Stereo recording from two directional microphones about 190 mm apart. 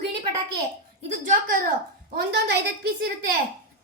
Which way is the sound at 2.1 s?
55° right (ahead or behind).